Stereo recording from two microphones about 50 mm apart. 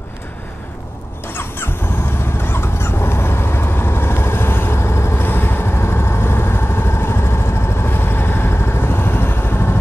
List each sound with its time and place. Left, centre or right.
1.2 s vehicle: left
5.2 s vehicle: left